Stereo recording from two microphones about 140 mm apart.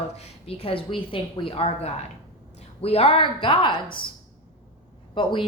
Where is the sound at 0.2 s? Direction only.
45° left (ahead or behind).